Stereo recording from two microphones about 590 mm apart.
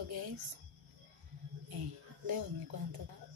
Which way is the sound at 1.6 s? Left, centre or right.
Right.